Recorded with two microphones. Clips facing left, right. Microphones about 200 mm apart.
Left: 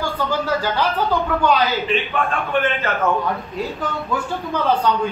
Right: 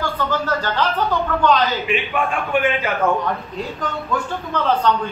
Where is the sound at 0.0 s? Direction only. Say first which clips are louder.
Even; 10° left (ahead or behind).